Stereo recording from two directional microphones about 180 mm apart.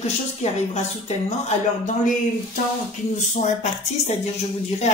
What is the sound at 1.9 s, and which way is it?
Speech, 45° left (ahead or behind).